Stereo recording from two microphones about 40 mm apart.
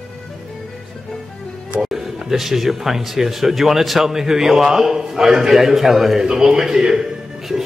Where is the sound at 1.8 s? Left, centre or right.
Centre.